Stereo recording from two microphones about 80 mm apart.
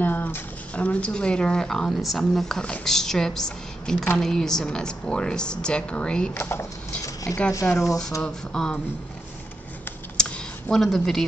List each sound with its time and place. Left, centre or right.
0.0 s speech: left
6.3 s speech: left
7.3 s speech: centre
8.2 s speech: centre
10.1 s a sound: centre
10.8 s speech: centre